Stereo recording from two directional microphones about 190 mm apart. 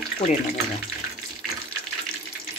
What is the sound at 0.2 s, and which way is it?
Speech, 30° left (ahead or behind).